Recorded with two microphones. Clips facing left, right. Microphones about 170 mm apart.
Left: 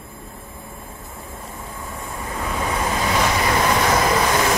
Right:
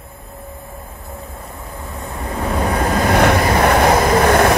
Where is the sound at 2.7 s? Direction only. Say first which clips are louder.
Right 7 dB; 60° right (ahead or behind).